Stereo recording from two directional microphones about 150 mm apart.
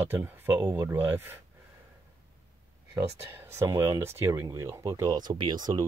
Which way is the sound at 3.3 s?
15° right (ahead or behind).